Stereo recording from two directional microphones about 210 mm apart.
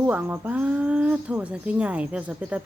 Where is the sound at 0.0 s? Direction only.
5° right (ahead or behind).